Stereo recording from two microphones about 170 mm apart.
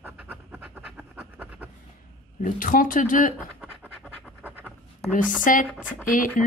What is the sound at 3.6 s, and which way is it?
Scratch, 5° right (ahead or behind).